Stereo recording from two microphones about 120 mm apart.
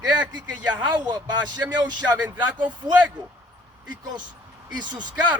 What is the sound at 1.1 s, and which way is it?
Speech, 35° right (ahead or behind).